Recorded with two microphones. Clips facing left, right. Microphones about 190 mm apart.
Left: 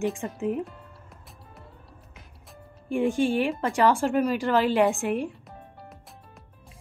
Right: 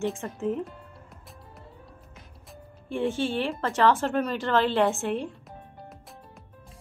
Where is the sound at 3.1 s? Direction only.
15° left (ahead or behind).